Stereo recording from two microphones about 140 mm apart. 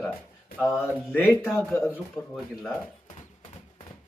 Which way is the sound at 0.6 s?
15° left (ahead or behind).